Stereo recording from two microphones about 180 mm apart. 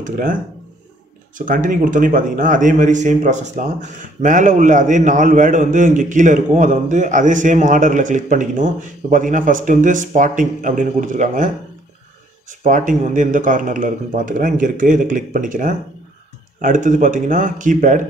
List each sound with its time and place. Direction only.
0.0 s a man's voice: 50° right (ahead or behind)
1.4 s a man's voice: 50° right (ahead or behind)